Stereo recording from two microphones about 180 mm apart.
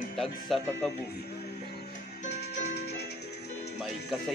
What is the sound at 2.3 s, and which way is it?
Music, 65° left (ahead or behind).